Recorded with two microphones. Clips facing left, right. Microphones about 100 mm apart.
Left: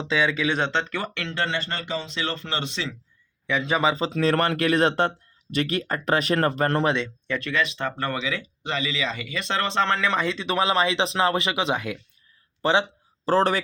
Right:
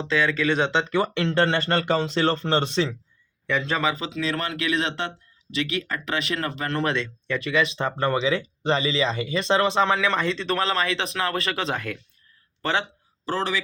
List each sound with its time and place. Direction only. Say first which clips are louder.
0.0 s speech: right 1 dB; 15° left (ahead or behind)
0.5 s speech: right 2 dB; 5° right (ahead or behind)
0.9 s speech: right 7 dB; 20° right (ahead or behind)
1.2 s speech: right 6 dB; 40° right (ahead or behind)
3.4 s a man's voice: left 1 dB; 5° left (ahead or behind)
3.8 s speech: left 3 dB; 30° left (ahead or behind)
4.1 s speech: left 6 dB; 50° left (ahead or behind)
6.8 s speech: left 2 dB; 15° left (ahead or behind)
7.3 s speech: right 4 dB; 10° right (ahead or behind); by 12.8 s 20° left (ahead or behind)
13.2 s a man's voice: left 6 dB; 40° left (ahead or behind)